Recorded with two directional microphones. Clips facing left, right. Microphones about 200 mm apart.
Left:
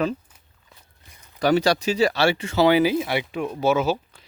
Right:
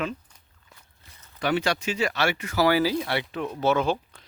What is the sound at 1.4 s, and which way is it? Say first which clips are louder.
Speech: left 6 dB; 40° left (ahead or behind).